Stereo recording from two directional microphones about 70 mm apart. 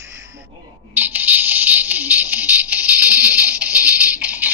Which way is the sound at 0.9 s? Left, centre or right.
Right.